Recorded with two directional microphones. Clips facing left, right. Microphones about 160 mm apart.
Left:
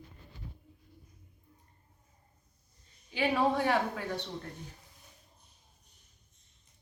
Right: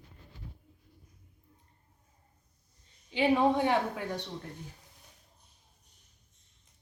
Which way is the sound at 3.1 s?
20° right (ahead or behind).